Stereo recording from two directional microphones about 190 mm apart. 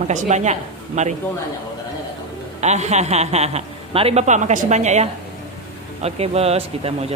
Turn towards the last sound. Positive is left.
turn(degrees=-35)  # may be behind; listen again after turning